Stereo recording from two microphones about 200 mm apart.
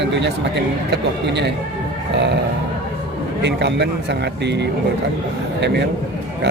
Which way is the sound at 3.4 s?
60° right (ahead or behind).